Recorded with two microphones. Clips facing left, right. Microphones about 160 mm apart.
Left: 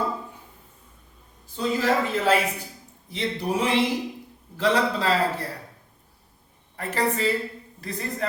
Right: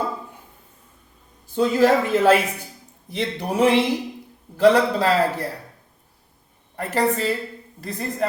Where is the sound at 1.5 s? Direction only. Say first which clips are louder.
Right 6 dB; 65° right (ahead or behind).